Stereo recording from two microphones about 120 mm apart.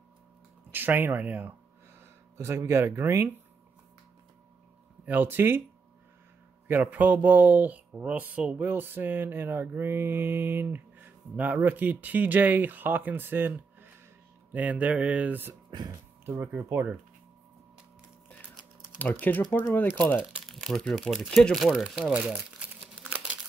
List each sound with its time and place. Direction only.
0.7 s speech: 15° right (ahead or behind)
5.0 s speech: 15° right (ahead or behind)
6.7 s speech: 15° right (ahead or behind)
18.9 s speech: 15° left (ahead or behind)
20.2 s speech: 5° right (ahead or behind)